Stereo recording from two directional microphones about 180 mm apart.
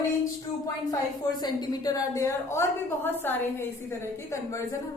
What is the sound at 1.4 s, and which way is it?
A woman's voice, 25° left (ahead or behind).